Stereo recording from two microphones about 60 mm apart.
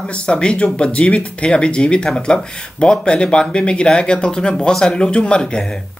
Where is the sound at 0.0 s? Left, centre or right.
Centre.